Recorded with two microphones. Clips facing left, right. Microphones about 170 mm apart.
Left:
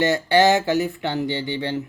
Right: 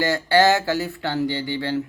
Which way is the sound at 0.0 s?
20° left (ahead or behind).